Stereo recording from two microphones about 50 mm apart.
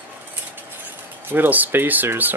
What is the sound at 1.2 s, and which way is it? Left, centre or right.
Speech, right.